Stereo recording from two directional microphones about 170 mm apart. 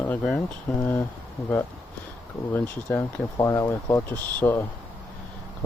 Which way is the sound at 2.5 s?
20° left (ahead or behind).